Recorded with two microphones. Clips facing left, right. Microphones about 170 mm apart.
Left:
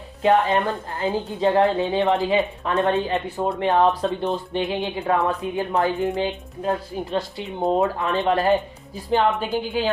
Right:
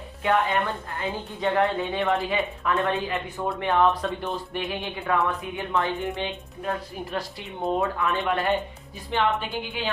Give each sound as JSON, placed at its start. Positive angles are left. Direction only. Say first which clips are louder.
{"t": 0.2, "sound": "a woman's voice", "louder": "left 5 dB", "side_deg": 25}